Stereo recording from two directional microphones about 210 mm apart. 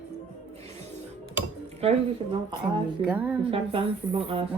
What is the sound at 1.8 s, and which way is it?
Dishes, 30° right (ahead or behind).